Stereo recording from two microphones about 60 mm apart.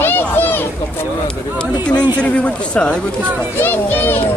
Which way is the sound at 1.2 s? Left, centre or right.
Centre.